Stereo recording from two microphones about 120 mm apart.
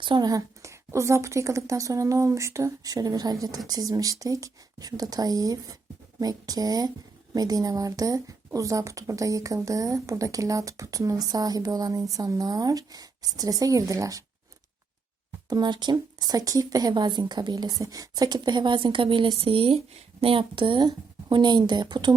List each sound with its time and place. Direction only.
0.0 s a woman's voice: 35° right (ahead or behind)
15.4 s a woman's voice: 35° right (ahead or behind)